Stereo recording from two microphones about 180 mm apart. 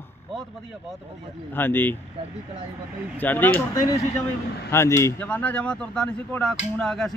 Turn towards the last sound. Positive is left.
turn(degrees=0)  # may be behind; listen again after turning